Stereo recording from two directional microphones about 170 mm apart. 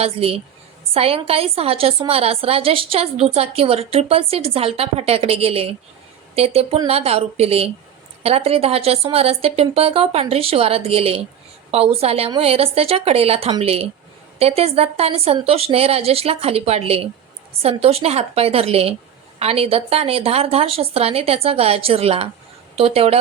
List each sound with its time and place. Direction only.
0.0 s a woman's voice: 35° right (ahead or behind)